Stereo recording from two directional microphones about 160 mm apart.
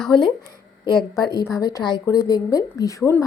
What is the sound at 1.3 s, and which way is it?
A woman's voice, 20° left (ahead or behind).